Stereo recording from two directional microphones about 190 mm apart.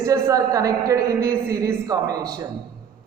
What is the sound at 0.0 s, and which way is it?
A woman's voice, 15° right (ahead or behind).